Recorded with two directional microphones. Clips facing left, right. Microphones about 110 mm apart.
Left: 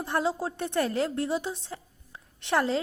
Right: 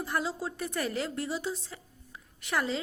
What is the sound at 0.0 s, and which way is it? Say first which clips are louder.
A woman's voice: left 4 dB; 25° left (ahead or behind).